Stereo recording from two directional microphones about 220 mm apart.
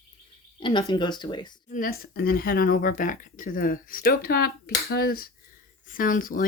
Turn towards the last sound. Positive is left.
turn(degrees=40)  # may be behind; listen again after turning